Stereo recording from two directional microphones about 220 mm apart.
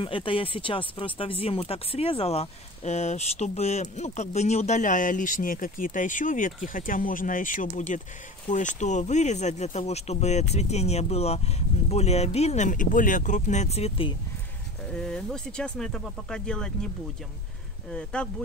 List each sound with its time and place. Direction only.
0.0 s speech: 25° left (ahead or behind)
15.0 s speech: 5° left (ahead or behind)
17.9 s speech: 5° left (ahead or behind)